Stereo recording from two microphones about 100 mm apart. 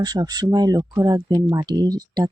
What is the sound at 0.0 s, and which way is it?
Speech, 40° right (ahead or behind).